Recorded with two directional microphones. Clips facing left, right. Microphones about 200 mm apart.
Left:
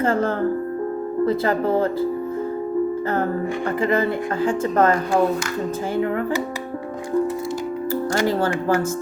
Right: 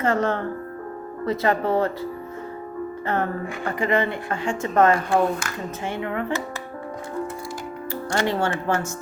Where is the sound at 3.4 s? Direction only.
30° left (ahead or behind).